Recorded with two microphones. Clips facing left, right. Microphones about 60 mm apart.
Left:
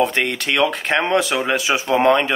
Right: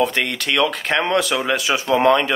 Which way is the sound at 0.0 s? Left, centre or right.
Left.